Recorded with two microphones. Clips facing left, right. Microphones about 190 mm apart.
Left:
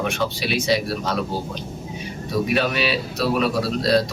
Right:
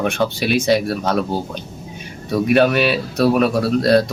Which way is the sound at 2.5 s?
55° right (ahead or behind).